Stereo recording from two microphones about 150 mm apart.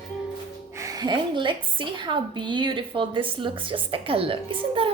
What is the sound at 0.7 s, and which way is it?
A woman's voice, 20° right (ahead or behind).